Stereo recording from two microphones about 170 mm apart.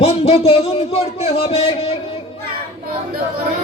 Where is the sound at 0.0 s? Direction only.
35° left (ahead or behind).